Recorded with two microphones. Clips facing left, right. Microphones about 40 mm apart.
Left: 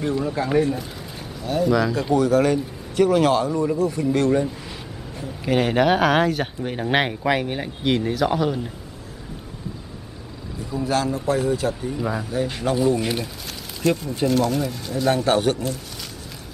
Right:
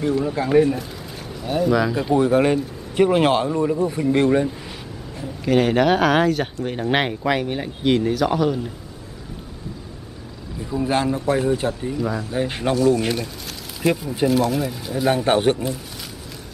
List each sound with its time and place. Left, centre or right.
0.0 s speech: centre
2.1 s speech: right
5.1 s speech: centre
10.8 s speech: right
12.0 s speech: centre
12.4 s speech: right
12.7 s speech: centre
13.8 s speech: centre